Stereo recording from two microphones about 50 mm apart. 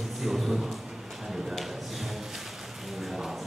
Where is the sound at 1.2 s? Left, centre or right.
Centre.